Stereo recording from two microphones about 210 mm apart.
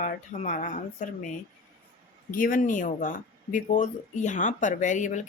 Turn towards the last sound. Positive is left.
turn(degrees=35)  # may be behind; listen again after turning